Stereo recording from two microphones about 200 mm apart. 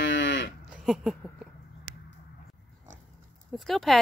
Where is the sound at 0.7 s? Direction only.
5° right (ahead or behind).